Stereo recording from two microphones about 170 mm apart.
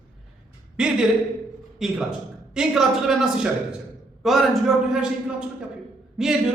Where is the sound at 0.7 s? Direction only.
5° right (ahead or behind).